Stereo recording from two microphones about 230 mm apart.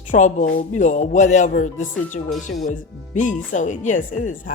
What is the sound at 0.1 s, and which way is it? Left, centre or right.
A woman's voice, left.